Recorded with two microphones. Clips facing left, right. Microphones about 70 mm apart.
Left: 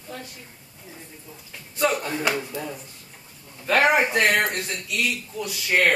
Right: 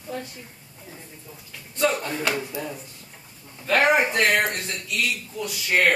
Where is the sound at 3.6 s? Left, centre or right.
Centre.